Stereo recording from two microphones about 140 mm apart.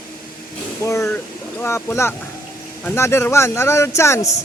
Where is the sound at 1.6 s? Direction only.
15° left (ahead or behind).